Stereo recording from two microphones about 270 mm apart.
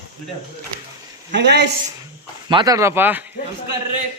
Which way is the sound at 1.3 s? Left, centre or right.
Right.